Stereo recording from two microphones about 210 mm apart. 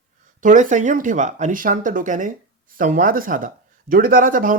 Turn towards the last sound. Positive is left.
turn(degrees=-40)  # may be behind; listen again after turning